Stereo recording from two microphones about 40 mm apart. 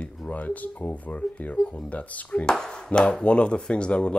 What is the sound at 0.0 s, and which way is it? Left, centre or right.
Speech, left.